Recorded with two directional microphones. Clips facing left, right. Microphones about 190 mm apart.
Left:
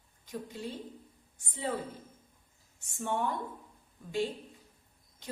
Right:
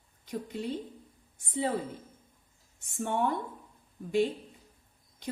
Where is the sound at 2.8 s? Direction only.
55° right (ahead or behind).